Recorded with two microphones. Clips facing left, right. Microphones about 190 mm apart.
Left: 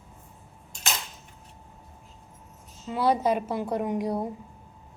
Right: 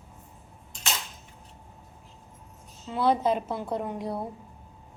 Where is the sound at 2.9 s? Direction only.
10° left (ahead or behind).